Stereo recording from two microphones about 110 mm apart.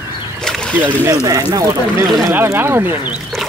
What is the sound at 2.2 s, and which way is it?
Speech, 20° right (ahead or behind).